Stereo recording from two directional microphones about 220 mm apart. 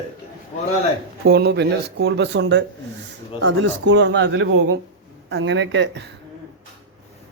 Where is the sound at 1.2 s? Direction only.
50° right (ahead or behind).